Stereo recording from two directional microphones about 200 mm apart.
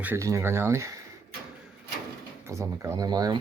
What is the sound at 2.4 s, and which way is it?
Speech, 15° right (ahead or behind).